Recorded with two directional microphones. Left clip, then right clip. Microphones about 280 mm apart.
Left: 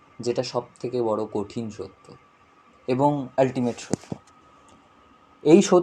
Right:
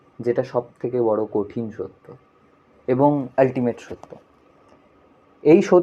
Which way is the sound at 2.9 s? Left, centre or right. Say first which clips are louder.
Right 4 dB; centre.